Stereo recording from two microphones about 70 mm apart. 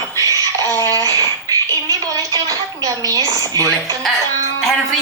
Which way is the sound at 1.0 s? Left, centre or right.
Right.